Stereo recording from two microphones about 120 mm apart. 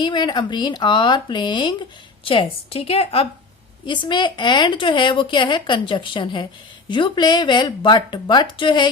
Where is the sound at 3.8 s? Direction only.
40° left (ahead or behind).